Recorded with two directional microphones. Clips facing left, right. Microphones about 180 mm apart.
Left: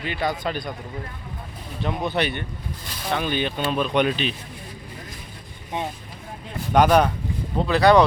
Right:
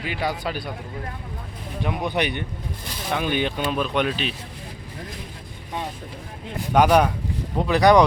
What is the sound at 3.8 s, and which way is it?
Speech, centre (ahead or behind).